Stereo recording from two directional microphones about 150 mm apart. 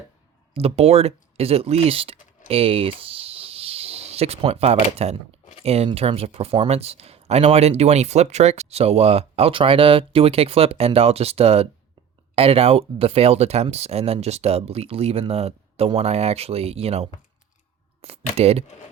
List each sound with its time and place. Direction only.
0.5 s speech: 40° right (ahead or behind)